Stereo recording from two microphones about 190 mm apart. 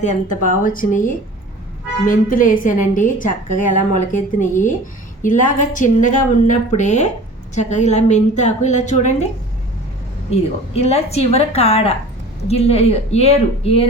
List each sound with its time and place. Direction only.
0.0 s a woman's voice: 40° left (ahead or behind)
10.3 s a woman's voice: 35° left (ahead or behind)